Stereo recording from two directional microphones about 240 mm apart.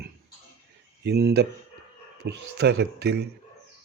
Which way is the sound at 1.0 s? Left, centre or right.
Right.